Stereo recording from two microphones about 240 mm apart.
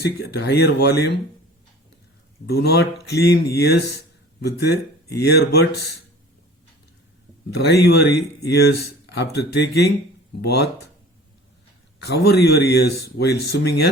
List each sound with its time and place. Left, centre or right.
0.0 s speech: left
2.5 s speech: left
7.7 s speech: left
12.0 s speech: left